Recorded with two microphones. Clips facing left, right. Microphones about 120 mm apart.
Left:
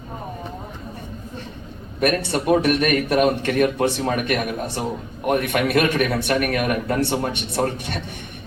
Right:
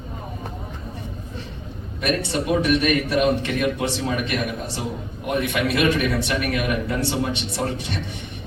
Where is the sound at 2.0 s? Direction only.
50° left (ahead or behind).